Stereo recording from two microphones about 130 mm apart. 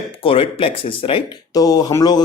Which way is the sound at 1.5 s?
30° left (ahead or behind).